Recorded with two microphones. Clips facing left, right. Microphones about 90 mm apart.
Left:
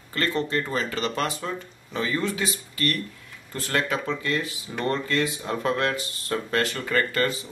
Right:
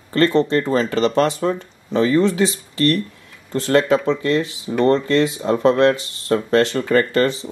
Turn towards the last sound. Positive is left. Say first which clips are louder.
# right 8 dB
turn(degrees=-25)  # may be behind; listen again after turning